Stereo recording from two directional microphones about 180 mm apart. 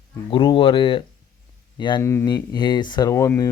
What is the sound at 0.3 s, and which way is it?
Speech, 30° left (ahead or behind).